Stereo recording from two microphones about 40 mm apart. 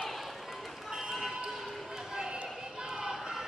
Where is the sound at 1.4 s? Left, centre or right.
Centre.